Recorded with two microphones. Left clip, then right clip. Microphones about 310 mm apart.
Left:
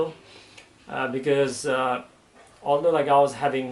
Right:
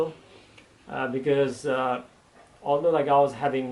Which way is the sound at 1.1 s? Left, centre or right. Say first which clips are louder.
Left 1 dB; centre.